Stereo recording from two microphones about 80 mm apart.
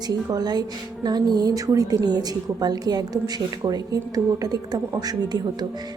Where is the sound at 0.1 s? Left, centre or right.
Right.